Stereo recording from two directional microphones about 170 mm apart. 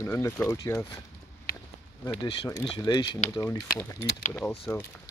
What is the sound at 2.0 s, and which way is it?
Speech, 25° left (ahead or behind).